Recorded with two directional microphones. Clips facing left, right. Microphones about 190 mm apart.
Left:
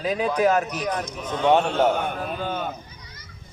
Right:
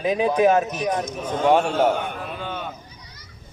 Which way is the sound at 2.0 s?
45° left (ahead or behind).